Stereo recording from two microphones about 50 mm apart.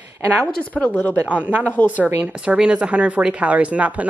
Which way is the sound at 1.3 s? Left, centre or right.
Right.